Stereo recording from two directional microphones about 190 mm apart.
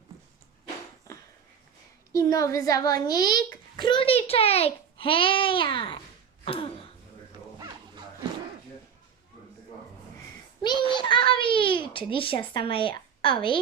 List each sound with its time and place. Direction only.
2.1 s a child's voice: 15° left (ahead or behind)
6.4 s throat clearing: 30° left (ahead or behind)
10.6 s a sound: 25° left (ahead or behind)
10.9 s babbling: 25° left (ahead or behind)